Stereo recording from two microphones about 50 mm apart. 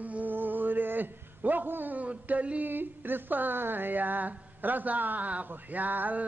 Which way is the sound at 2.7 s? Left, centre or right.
Right.